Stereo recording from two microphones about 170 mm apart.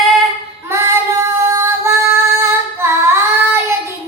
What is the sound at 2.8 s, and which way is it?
Child singing, 15° right (ahead or behind).